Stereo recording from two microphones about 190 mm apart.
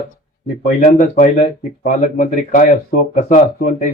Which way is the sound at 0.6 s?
40° left (ahead or behind).